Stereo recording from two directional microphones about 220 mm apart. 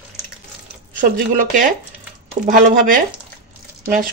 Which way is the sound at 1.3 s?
35° right (ahead or behind).